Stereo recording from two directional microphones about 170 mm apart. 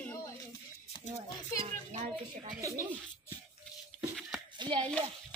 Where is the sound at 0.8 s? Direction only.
40° left (ahead or behind).